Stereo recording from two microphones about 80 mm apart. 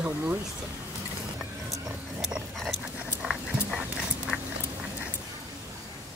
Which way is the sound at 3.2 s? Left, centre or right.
Centre.